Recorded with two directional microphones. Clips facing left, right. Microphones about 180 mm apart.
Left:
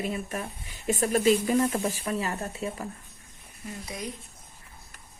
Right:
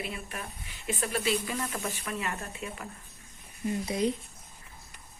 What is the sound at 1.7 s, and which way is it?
Speech, 30° left (ahead or behind).